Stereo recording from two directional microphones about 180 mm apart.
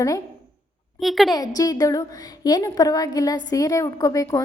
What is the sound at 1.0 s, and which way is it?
Speech, centre (ahead or behind).